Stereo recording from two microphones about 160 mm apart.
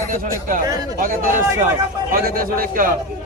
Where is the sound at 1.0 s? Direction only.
55° right (ahead or behind).